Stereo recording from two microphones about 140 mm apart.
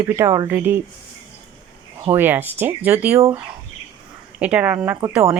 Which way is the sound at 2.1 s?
15° right (ahead or behind).